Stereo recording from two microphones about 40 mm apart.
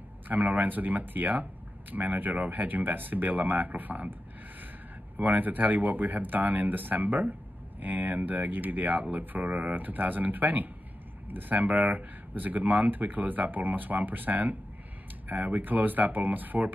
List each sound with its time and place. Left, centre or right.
0.3 s speech: right